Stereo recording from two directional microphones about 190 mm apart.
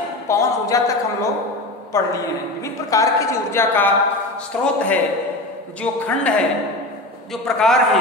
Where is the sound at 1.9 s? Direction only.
15° left (ahead or behind).